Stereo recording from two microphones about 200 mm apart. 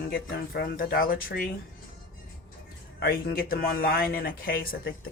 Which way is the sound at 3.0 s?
50° left (ahead or behind).